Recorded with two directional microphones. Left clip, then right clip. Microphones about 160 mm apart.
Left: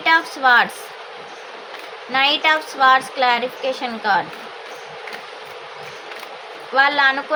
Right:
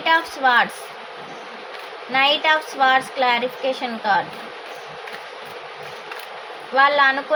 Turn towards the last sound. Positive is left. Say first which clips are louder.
# even
turn(degrees=15)  # may be behind; listen again after turning